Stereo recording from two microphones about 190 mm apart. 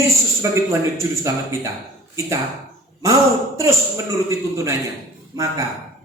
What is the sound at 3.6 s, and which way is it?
A woman's voice, 15° right (ahead or behind).